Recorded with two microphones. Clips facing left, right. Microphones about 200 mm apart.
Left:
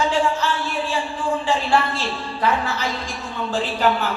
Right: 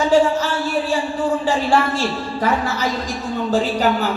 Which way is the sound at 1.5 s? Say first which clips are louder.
Right 1 dB; 45° right (ahead or behind).